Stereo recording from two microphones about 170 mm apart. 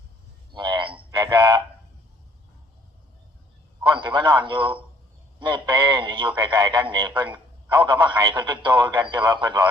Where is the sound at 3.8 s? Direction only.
30° right (ahead or behind).